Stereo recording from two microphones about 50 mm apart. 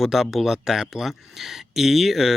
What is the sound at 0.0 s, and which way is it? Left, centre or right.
Speech, centre.